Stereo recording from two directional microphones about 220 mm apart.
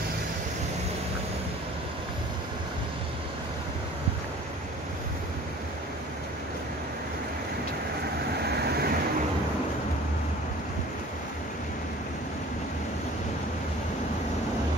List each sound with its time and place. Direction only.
8.5 s vehicle: 45° right (ahead or behind)